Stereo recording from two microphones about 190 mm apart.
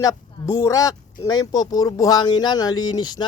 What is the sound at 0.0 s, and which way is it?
A man's voice, 20° left (ahead or behind).